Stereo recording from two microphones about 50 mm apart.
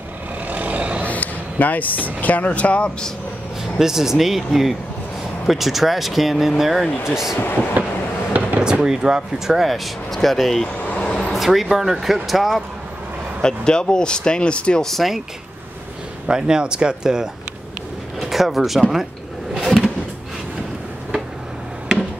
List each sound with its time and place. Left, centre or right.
0.5 s vehicle: right
1.0 s a sound: left
2.2 s speech: left
3.6 s speech: centre
7.8 s a sound: right
8.6 s speech: centre
9.6 s speech: centre
10.7 s vehicle: left
11.3 s speech: centre
13.4 s speech: centre
14.8 s speech: centre
16.3 s speech: centre
18.2 s speech: centre
19.5 s vehicle: centre